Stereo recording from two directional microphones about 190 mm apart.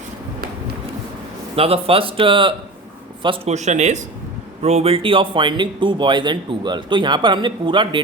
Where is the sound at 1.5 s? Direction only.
30° right (ahead or behind).